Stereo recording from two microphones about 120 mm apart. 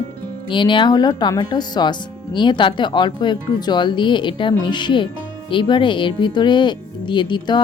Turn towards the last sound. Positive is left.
turn(degrees=40)  # may be behind; listen again after turning